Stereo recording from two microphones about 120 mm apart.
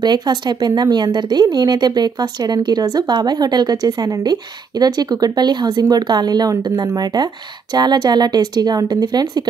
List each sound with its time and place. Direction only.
0.0 s speech: 35° right (ahead or behind)